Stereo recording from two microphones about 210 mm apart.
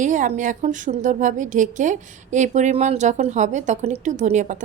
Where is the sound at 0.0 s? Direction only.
35° right (ahead or behind).